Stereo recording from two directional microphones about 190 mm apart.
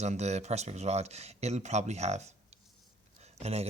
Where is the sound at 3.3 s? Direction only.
35° right (ahead or behind).